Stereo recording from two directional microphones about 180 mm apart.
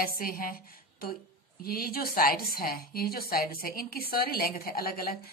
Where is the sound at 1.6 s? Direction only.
55° left (ahead or behind).